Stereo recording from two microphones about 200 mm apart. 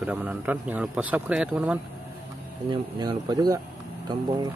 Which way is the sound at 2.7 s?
20° right (ahead or behind).